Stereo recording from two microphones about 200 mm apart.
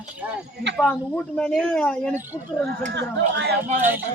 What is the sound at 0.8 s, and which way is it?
Speech, centre (ahead or behind).